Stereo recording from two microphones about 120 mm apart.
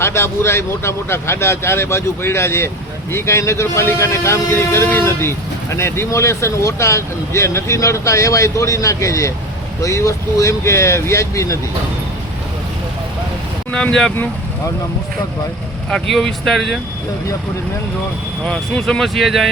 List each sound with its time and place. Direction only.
0.0 s speech: 20° left (ahead or behind)
13.7 s speech: 5° left (ahead or behind)
15.9 s speech: 5° left (ahead or behind)
18.4 s speech: 5° left (ahead or behind)